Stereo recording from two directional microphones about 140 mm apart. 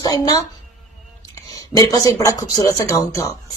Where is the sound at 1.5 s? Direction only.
25° left (ahead or behind).